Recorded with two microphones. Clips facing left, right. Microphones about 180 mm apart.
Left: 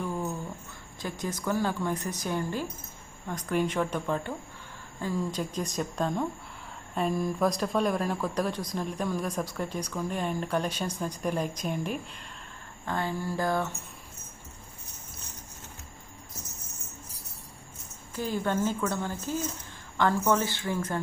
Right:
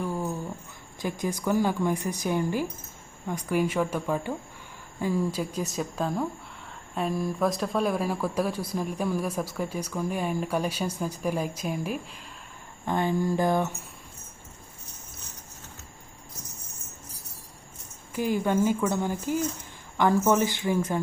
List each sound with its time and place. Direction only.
0.0 s a sound: 10° right (ahead or behind)
1.0 s speech: 10° right (ahead or behind)
12.8 s speech: 15° right (ahead or behind)
18.1 s speech: 10° right (ahead or behind)